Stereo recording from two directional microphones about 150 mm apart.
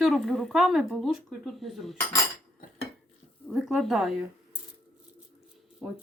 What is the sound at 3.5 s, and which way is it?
Speech, centre (ahead or behind).